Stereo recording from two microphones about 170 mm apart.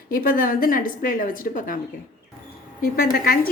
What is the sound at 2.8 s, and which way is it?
Speech, 60° left (ahead or behind).